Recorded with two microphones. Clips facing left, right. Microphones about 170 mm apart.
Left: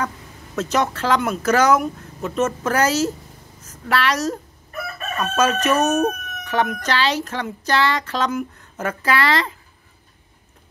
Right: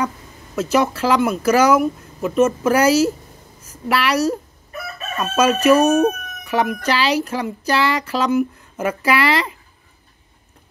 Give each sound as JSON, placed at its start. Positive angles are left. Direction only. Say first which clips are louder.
{"t": 0.6, "sound": "speech", "louder": "right 3 dB", "side_deg": -10}